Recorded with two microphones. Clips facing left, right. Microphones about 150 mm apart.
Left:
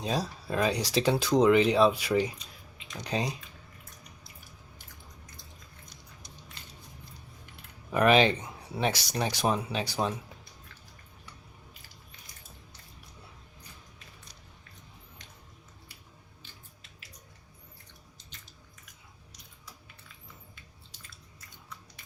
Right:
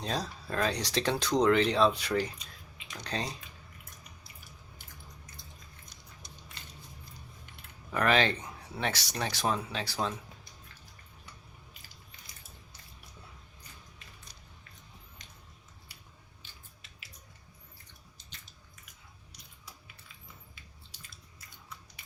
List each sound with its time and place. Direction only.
0.0 s speech: 10° left (ahead or behind)
7.9 s speech: 15° left (ahead or behind)